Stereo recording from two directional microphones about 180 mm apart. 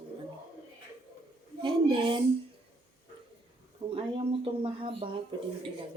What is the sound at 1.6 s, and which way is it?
Speech, 30° right (ahead or behind).